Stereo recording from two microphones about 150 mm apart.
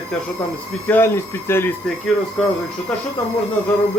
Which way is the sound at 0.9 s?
15° left (ahead or behind).